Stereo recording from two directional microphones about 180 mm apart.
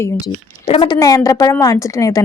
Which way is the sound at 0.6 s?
30° left (ahead or behind).